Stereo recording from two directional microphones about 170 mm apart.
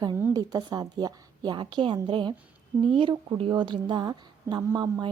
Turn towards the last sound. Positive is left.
turn(degrees=-25)  # may be behind; listen again after turning